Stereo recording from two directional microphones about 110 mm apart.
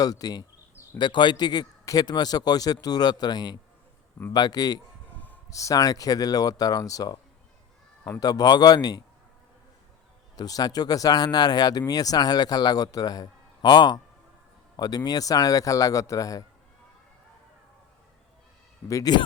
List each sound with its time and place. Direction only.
0.0 s a man's voice: 35° left (ahead or behind)
8.2 s speech: 35° left (ahead or behind)
10.3 s speech: 35° left (ahead or behind)
18.9 s speech: 30° left (ahead or behind)